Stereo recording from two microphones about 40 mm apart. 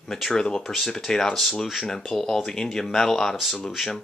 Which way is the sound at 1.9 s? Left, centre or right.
Centre.